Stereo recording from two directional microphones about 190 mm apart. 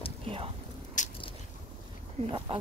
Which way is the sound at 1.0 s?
40° left (ahead or behind).